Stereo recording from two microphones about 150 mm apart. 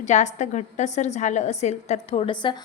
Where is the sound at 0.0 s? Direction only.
50° left (ahead or behind).